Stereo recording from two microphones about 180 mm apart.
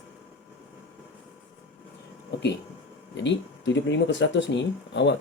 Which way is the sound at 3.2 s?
80° left.